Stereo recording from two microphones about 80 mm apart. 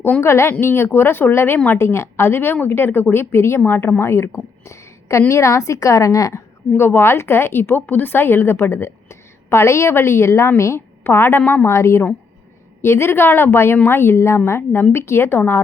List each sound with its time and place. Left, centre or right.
0.2 s a woman's voice: left
1.8 s a woman's voice: left
6.7 s a woman's voice: left
11.7 s a woman's voice: left